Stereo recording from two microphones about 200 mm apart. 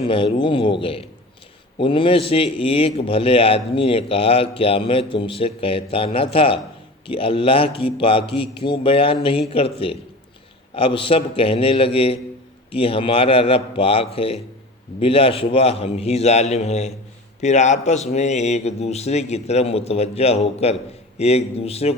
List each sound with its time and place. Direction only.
0.0 s a man's voice: 25° left (ahead or behind)